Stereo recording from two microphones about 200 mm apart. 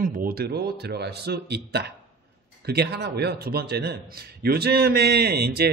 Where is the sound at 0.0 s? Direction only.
45° right (ahead or behind).